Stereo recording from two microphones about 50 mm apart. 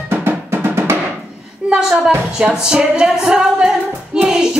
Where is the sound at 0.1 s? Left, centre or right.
Right.